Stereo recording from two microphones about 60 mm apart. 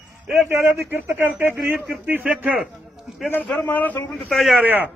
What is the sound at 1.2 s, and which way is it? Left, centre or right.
Speech, right.